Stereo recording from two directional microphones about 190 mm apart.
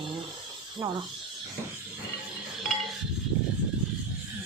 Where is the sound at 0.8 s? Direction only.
10° right (ahead or behind).